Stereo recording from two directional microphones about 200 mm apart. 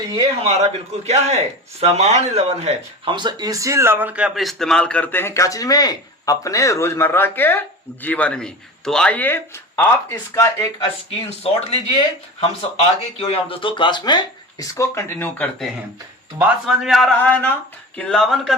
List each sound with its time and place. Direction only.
0.4 s a man's voice: 30° right (ahead or behind); by 10.7 s 15° left (ahead or behind)
11.7 s speech: 25° left (ahead or behind); by 18.5 s centre (ahead or behind)